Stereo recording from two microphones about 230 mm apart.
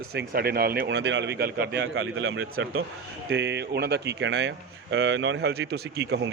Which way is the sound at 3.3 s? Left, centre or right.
Right.